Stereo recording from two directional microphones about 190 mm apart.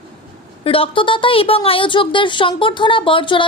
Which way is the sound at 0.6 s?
30° left (ahead or behind).